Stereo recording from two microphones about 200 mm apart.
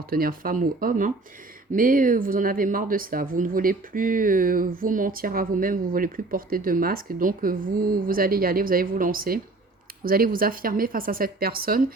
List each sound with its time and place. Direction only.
0.1 s speech: 45° right (ahead or behind)